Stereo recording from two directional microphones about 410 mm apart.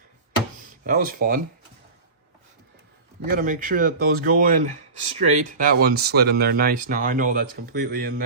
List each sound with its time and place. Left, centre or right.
0.6 s speech: centre
3.2 s speech: centre